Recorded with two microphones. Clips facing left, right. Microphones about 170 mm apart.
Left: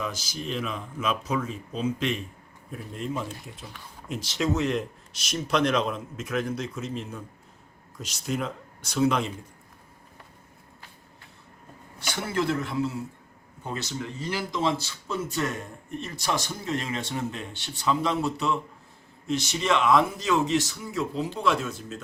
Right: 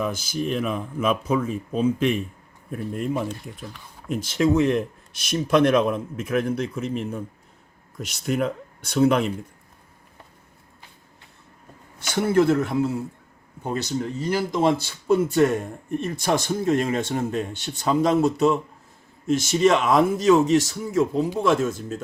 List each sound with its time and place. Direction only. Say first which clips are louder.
0.0 s speech: right 7 dB; 55° right (ahead or behind)
12.1 s speech: right 9 dB; 55° right (ahead or behind)
13.7 s speech: right 7 dB; 40° right (ahead or behind)